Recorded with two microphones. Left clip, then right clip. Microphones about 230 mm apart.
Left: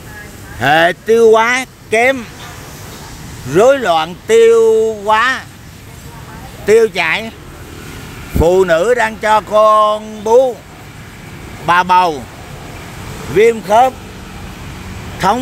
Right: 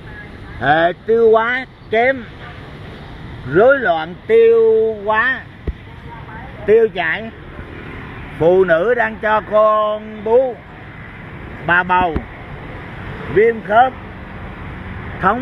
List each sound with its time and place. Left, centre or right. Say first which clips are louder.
0.6 s speech: left 3 dB; left
3.5 s speech: left 2 dB; left
6.6 s speech: left 3 dB; left
8.4 s speech: left 2 dB; left
11.6 s speech: left 4 dB; left
13.4 s speech: left 3 dB; left